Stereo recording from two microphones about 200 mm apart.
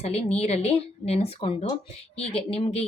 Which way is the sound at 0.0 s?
30° left (ahead or behind).